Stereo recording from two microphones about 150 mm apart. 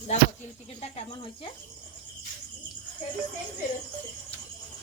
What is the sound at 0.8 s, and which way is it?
Speech, 45° left (ahead or behind).